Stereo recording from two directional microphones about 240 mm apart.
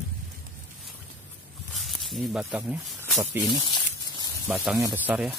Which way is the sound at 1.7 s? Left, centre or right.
Centre.